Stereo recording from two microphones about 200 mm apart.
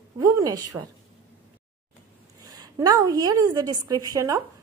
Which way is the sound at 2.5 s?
20° right (ahead or behind).